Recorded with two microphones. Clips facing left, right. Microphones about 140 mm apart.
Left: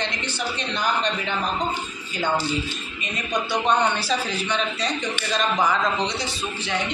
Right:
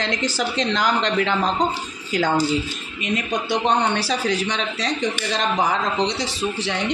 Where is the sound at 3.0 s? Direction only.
90° right.